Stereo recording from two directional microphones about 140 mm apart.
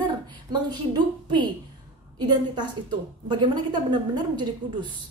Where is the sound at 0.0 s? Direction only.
30° right (ahead or behind).